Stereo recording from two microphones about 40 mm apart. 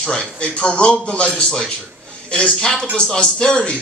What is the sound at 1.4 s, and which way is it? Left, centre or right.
A man's voice, centre.